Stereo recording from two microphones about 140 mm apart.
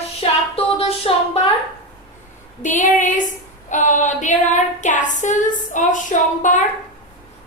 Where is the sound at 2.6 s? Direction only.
65° left (ahead or behind).